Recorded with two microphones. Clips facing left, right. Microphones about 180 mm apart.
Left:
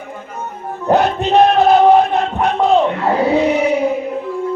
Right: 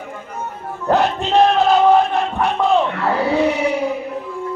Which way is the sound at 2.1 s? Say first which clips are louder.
Left 2 dB; 60° left (ahead or behind).